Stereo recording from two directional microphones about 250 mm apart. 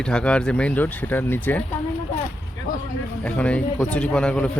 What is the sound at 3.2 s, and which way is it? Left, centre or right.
Speech, centre.